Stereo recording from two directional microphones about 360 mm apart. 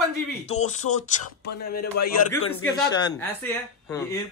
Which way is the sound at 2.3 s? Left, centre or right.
Centre.